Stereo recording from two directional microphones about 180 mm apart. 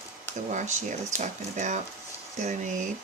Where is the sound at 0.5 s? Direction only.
45° right (ahead or behind).